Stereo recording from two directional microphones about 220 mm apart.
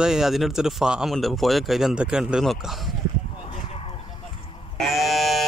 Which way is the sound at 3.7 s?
25° left (ahead or behind).